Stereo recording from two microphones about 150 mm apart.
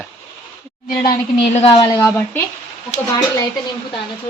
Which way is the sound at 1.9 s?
20° left (ahead or behind).